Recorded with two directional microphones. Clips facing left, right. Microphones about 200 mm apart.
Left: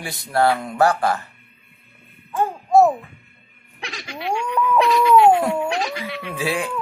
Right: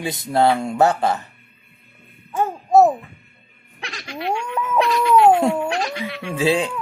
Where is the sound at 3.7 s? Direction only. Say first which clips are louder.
Right 1 dB; centre (ahead or behind).